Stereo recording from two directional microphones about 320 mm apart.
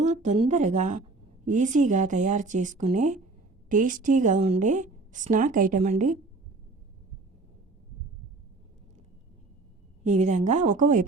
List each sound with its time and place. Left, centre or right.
0.0 s a woman's voice: right
10.0 s a woman's voice: right